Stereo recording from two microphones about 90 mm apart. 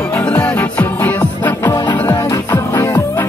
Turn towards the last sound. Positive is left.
turn(degrees=30)  # may be behind; listen again after turning